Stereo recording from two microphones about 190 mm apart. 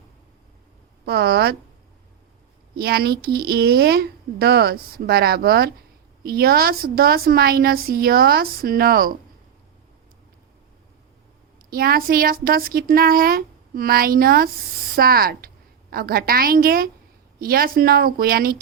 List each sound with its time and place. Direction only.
1.0 s speech: 55° right (ahead or behind)
2.7 s a woman's voice: 55° right (ahead or behind)
11.7 s a woman's voice: 50° right (ahead or behind)